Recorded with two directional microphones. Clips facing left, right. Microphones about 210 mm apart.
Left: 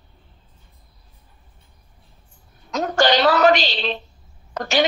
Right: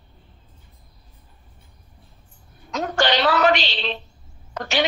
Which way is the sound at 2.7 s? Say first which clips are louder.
Left 3 dB; 40° left (ahead or behind).